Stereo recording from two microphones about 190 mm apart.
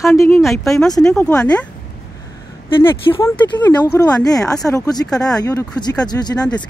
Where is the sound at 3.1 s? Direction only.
15° left (ahead or behind).